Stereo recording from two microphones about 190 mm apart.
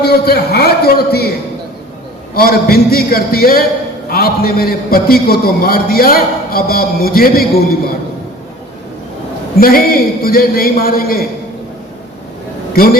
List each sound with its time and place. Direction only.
0.0 s a man's voice: 55° left (ahead or behind)
2.3 s a man's voice: 55° left (ahead or behind)
9.6 s a man's voice: 50° left (ahead or behind)
12.7 s a man's voice: 50° left (ahead or behind)